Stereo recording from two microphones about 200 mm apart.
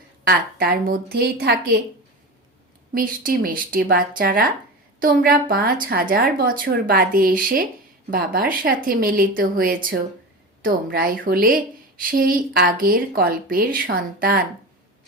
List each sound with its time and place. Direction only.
0.3 s a woman's voice: 45° right (ahead or behind)
2.9 s a woman's voice: 45° right (ahead or behind)